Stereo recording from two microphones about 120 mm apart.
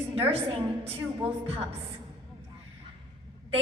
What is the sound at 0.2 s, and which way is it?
Speech, 55° right (ahead or behind).